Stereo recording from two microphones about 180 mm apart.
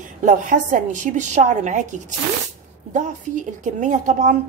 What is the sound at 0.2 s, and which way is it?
Speech, 45° right (ahead or behind).